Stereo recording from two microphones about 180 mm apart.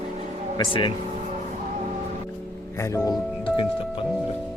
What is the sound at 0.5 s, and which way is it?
Speech, 30° left (ahead or behind).